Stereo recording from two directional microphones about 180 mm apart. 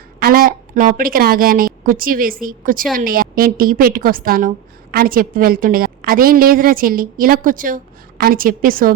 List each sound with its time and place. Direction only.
0.2 s a woman's voice: 55° right (ahead or behind)